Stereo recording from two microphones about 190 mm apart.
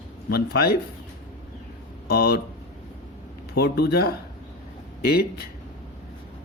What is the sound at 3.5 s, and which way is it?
Speech, 55° left (ahead or behind).